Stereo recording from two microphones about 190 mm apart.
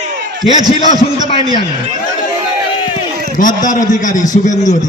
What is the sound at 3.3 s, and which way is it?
A man's voice, 45° left (ahead or behind).